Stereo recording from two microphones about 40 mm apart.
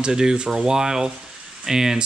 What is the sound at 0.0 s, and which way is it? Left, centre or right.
Speech, centre.